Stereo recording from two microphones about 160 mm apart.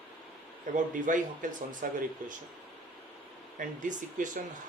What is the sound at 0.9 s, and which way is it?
Speech, 55° right (ahead or behind).